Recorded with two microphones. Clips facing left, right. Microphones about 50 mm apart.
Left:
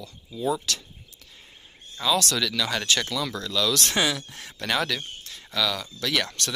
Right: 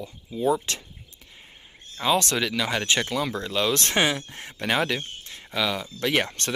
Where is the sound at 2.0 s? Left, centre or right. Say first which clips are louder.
Right 1 dB; right.